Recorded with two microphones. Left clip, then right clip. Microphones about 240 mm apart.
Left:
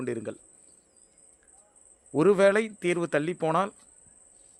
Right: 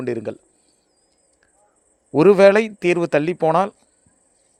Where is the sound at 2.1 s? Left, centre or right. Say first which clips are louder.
Right 9 dB; right.